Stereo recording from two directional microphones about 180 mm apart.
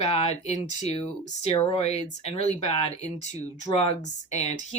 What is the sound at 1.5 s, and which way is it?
Speech, 35° left (ahead or behind).